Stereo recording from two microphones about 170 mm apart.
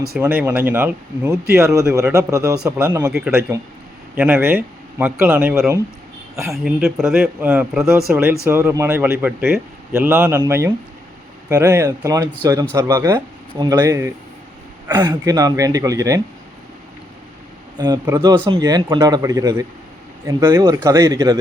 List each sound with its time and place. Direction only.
0.2 s a man's voice: 15° right (ahead or behind)
6.5 s a man's voice: 5° right (ahead or behind)
15.1 s speech: 20° right (ahead or behind)
17.7 s a man's voice: 25° right (ahead or behind)